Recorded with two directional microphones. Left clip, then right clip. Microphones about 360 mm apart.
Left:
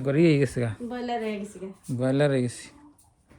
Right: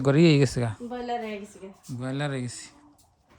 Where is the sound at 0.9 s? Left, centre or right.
Left.